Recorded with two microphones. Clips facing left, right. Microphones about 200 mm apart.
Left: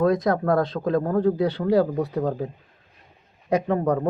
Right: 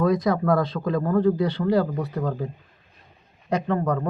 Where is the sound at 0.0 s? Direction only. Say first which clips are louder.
Left 1 dB; 5° right (ahead or behind).